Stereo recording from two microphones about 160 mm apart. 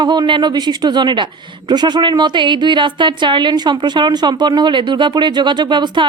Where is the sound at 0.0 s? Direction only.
30° right (ahead or behind).